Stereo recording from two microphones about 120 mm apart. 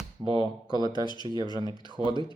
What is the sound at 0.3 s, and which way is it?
Speech, 40° right (ahead or behind).